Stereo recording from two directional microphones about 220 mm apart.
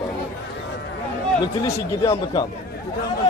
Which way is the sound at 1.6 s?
15° left (ahead or behind).